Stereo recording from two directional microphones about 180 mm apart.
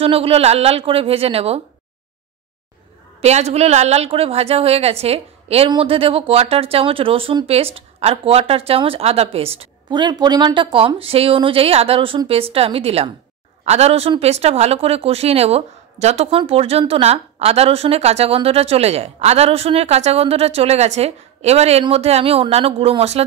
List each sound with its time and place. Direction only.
0.0 s a woman's voice: 30° right (ahead or behind)
3.2 s a woman's voice: 35° right (ahead or behind)